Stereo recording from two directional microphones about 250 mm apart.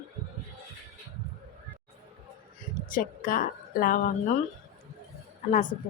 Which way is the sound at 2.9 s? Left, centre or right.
Left.